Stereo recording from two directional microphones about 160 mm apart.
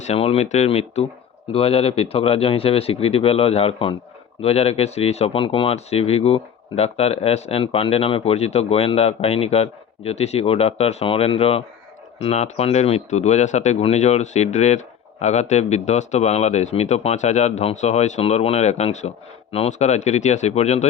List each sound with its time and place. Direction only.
0.1 s speech: 40° left (ahead or behind)